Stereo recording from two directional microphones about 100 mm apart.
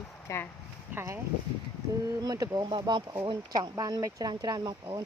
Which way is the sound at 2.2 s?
35° right (ahead or behind).